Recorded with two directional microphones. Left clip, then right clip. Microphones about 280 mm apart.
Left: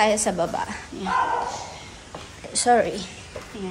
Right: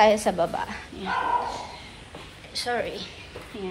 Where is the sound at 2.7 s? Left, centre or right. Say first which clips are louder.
Left 10 dB; centre.